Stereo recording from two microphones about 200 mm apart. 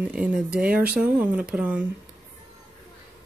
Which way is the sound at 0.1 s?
5° right (ahead or behind).